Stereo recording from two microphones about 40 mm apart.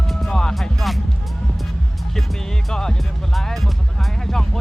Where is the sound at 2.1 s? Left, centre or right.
Centre.